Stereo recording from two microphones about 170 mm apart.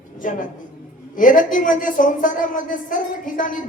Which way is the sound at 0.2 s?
50° left (ahead or behind).